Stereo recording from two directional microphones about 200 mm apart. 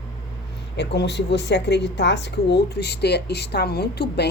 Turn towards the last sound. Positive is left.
turn(degrees=55)  # may be behind; listen again after turning